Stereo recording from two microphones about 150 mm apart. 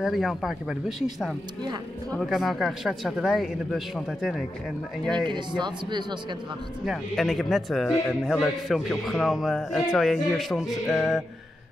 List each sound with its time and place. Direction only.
0.0 s speech: centre (ahead or behind)
1.6 s speech: 30° right (ahead or behind)
2.1 s speech: centre (ahead or behind)
5.1 s speech: 30° right (ahead or behind)
6.8 s speech: centre (ahead or behind)